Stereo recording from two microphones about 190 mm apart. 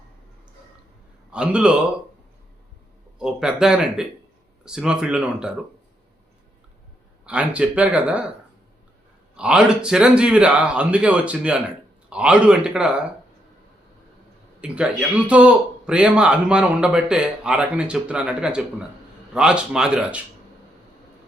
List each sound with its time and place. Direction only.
1.3 s a man's voice: 5° right (ahead or behind)
3.2 s a man's voice: 5° right (ahead or behind)
7.3 s speech: 5° right (ahead or behind)
9.3 s a man's voice: 5° right (ahead or behind)
14.6 s a man's voice: 5° right (ahead or behind)